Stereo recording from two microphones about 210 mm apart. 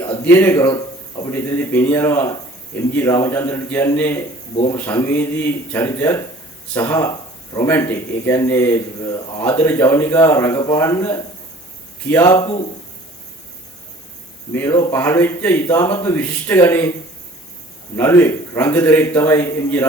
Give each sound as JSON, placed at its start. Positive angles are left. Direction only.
{"t": 0.3, "sound": "speech", "side_deg": 10}
{"t": 4.5, "sound": "speech", "side_deg": 25}
{"t": 4.8, "sound": "speech", "side_deg": 10}
{"t": 14.5, "sound": "speech", "side_deg": 15}
{"t": 17.9, "sound": "speech", "side_deg": 10}